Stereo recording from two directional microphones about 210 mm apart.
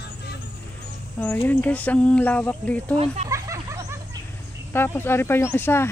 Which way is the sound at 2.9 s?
30° right (ahead or behind).